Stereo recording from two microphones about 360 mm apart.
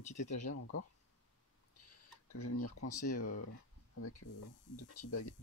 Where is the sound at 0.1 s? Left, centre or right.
Centre.